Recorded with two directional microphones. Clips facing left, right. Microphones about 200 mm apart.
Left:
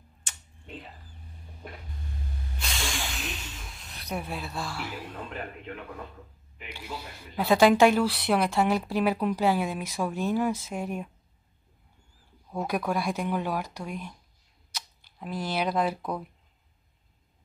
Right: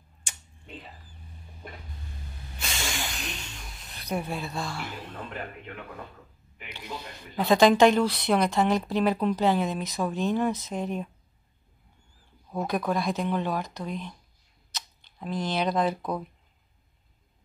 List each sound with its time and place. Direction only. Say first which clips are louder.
0.3 s a sound: right 1 dB; 15° right (ahead or behind)
2.6 s snake: right 1 dB; centre (ahead or behind)
6.7 s speech: right 1 dB; 10° left (ahead or behind)
12.6 s speech: right 1 dB; 10° left (ahead or behind)